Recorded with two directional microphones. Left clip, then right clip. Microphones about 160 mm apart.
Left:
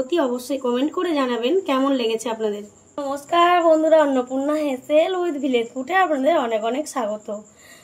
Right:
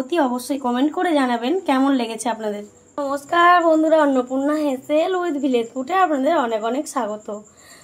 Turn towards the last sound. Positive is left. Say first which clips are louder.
# even
turn(degrees=-10)  # may be behind; listen again after turning